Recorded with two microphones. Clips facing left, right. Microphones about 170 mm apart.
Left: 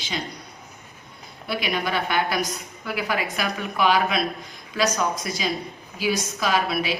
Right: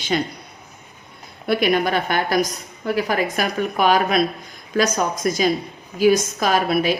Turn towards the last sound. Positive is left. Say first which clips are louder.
# right 5 dB
turn(degrees=-50)  # may be behind; listen again after turning